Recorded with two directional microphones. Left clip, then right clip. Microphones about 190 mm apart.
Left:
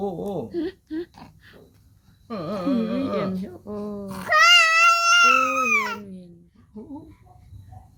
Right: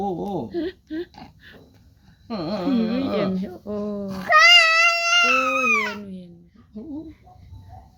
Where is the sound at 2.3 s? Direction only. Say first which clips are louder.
Right 1 dB; 15° left (ahead or behind).